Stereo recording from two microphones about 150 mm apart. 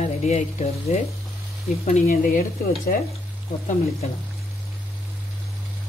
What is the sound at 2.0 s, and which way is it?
Speech, 70° left (ahead or behind).